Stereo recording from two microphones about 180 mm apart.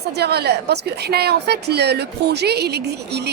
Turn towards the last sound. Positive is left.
turn(degrees=-65)  # may be behind; listen again after turning